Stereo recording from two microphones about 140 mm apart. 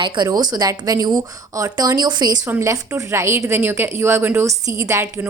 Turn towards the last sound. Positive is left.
turn(degrees=-20)  # may be behind; listen again after turning